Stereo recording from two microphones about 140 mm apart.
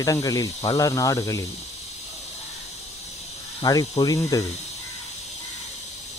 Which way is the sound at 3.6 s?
25° left (ahead or behind).